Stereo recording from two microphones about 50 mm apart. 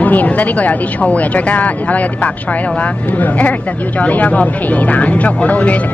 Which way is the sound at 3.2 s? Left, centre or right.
Left.